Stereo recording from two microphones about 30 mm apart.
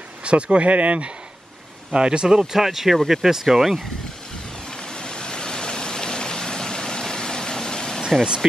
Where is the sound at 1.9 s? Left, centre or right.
Right.